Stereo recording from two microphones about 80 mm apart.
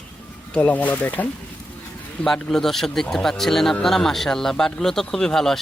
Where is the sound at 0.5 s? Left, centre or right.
Centre.